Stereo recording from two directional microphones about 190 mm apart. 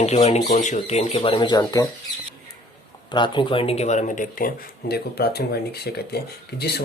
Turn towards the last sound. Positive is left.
turn(degrees=60)  # may be behind; listen again after turning